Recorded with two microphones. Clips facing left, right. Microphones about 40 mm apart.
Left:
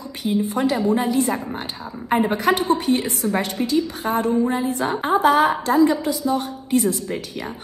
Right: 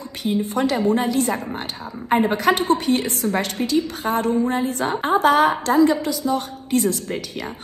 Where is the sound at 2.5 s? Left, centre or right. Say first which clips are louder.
Even; right.